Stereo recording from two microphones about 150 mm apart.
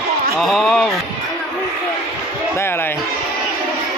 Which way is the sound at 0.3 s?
Centre (ahead or behind).